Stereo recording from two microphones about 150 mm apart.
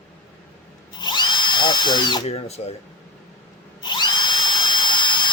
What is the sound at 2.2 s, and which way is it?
Speech, 45° left (ahead or behind).